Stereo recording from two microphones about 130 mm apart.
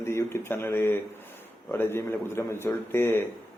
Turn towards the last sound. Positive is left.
turn(degrees=15)  # may be behind; listen again after turning